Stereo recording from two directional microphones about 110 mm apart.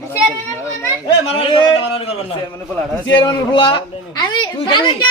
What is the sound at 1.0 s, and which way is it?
Speech, 60° left (ahead or behind).